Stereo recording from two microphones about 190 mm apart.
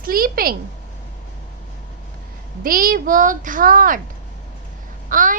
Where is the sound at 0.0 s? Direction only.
50° right (ahead or behind).